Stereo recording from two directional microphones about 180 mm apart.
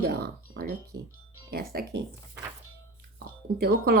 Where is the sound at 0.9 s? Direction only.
70° right (ahead or behind).